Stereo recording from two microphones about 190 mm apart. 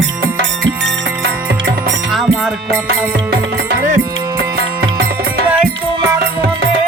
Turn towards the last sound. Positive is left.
turn(degrees=-55)  # may be behind; listen again after turning